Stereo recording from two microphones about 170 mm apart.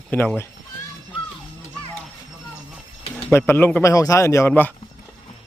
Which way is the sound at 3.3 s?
15° left (ahead or behind).